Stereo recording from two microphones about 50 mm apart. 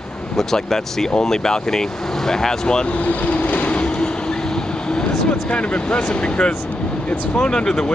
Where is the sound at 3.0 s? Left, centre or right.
Left.